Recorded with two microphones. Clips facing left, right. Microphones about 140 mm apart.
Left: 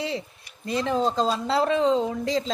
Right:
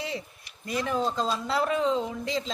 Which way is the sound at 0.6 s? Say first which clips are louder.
Left 4 dB; 30° left (ahead or behind).